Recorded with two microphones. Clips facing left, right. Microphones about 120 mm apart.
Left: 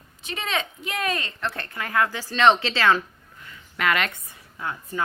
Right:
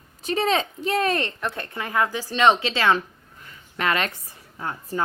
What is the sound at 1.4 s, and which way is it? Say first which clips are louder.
Speech: right 1 dB; 20° right (ahead or behind).